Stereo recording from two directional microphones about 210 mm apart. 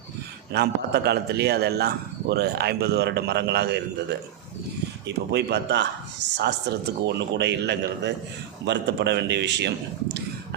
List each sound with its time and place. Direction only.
0.5 s a man's voice: 50° right (ahead or behind)
5.0 s a man's voice: 55° right (ahead or behind)